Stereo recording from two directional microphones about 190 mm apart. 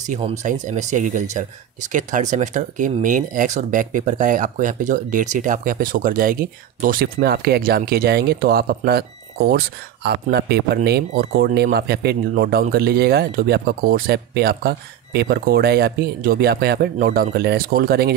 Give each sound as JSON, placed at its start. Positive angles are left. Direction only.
{"t": 0.0, "sound": "speech", "side_deg": -40}